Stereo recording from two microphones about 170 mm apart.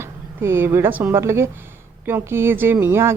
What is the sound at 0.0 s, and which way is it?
Speech, 15° right (ahead or behind).